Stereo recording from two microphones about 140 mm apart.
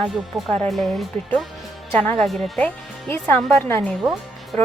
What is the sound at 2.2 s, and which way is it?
Speech, centre (ahead or behind).